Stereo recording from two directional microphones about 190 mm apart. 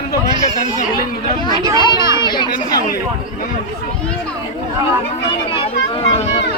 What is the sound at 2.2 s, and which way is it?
Speech, 25° left (ahead or behind).